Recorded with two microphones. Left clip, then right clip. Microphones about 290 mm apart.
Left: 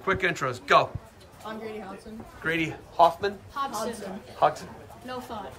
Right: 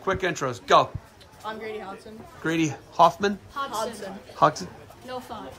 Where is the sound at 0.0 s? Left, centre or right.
Centre.